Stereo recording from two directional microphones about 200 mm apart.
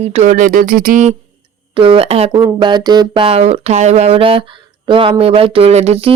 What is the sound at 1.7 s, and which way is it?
Speech, 25° right (ahead or behind).